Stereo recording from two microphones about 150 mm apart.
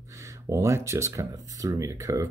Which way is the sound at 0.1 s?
20° right (ahead or behind).